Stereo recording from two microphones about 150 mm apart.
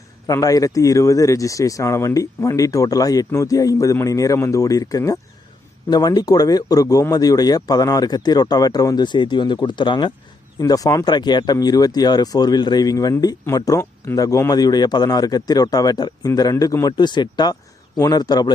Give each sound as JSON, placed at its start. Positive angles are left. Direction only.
{"t": 0.3, "sound": "speech", "side_deg": 25}